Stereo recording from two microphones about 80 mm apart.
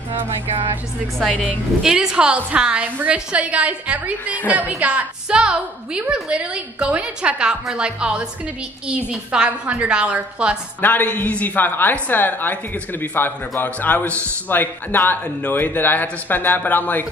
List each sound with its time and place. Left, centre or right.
1.8 s a woman's voice: centre
10.8 s a woman's voice: left